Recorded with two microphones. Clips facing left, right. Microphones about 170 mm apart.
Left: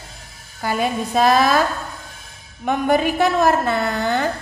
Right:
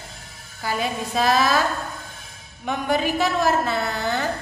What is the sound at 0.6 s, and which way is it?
Speech, 50° left (ahead or behind).